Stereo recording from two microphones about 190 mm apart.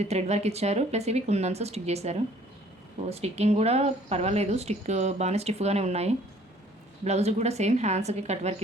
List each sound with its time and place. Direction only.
0.0 s a woman's voice: 35° right (ahead or behind)